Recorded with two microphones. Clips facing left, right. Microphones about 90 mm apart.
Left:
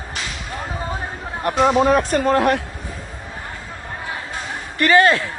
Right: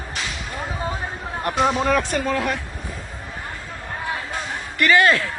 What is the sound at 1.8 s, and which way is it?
Speech, 40° left (ahead or behind).